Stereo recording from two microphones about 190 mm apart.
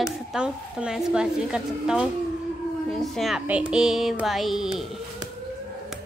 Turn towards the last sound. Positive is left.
turn(degrees=0)  # may be behind; listen again after turning